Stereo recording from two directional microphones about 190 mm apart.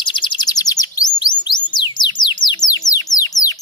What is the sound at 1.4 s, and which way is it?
Music, 25° left (ahead or behind).